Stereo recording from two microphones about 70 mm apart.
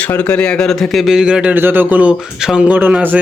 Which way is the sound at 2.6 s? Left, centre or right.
Right.